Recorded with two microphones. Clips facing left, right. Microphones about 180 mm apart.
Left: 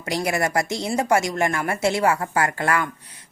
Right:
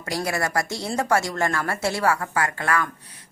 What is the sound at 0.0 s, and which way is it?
A woman's voice, 20° left (ahead or behind).